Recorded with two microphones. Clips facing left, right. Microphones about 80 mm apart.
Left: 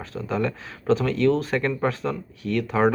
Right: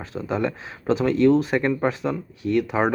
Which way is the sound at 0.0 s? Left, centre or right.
Centre.